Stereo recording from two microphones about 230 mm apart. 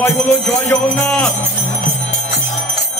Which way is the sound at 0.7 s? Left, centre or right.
Centre.